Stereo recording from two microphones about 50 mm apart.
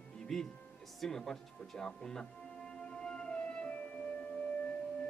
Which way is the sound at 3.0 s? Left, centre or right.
Centre.